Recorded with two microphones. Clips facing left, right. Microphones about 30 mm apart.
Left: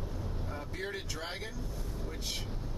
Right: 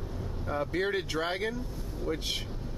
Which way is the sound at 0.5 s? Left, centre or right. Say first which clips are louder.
Right 11 dB; right.